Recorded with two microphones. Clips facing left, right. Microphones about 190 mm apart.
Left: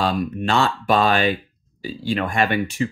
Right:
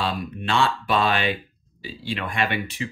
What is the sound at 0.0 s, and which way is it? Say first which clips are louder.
Speech: left 6 dB; 45° left (ahead or behind).